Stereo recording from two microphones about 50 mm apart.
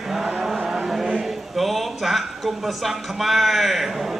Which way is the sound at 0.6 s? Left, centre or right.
Centre.